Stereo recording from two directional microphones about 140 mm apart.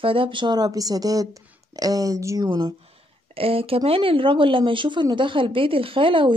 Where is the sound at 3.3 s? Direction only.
40° right (ahead or behind).